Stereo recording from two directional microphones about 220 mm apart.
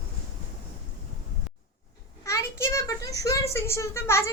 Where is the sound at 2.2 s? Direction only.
15° left (ahead or behind).